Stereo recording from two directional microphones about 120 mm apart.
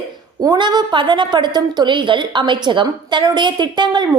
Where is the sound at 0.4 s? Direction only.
35° right (ahead or behind).